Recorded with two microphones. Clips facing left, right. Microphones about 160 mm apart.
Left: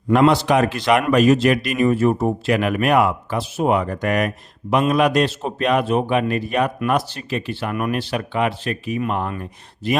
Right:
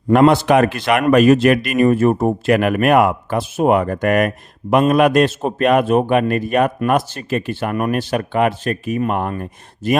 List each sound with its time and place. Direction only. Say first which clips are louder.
0.1 s a man's voice: right 3 dB; 50° right (ahead or behind)